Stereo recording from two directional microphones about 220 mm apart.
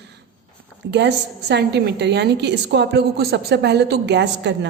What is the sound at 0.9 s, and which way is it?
A woman's voice, 50° right (ahead or behind).